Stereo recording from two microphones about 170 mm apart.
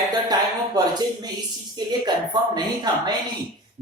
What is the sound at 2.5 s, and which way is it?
Speech, 25° right (ahead or behind).